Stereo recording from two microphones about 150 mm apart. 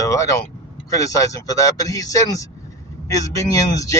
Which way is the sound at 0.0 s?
20° left (ahead or behind).